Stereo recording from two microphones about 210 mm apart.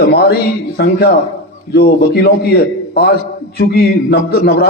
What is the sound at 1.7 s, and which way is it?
A man's voice, 50° left (ahead or behind).